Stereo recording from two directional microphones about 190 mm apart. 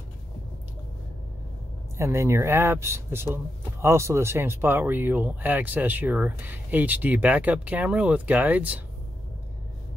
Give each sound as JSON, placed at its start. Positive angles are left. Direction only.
{"t": 2.0, "sound": "speech", "side_deg": -15}